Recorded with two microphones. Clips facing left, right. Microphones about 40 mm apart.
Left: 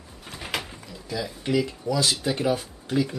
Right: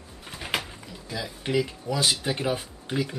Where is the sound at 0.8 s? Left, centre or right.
Centre.